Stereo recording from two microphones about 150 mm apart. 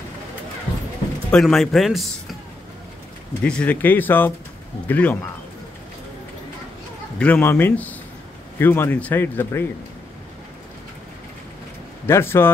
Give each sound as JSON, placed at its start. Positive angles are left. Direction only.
{"t": 1.3, "sound": "a man's voice", "side_deg": 0}
{"t": 3.4, "sound": "speech", "side_deg": 10}
{"t": 7.2, "sound": "speech", "side_deg": 10}
{"t": 12.1, "sound": "speech", "side_deg": 15}